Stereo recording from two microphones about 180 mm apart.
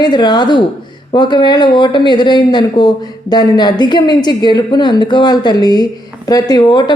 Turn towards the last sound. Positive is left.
turn(degrees=25)  # may be behind; listen again after turning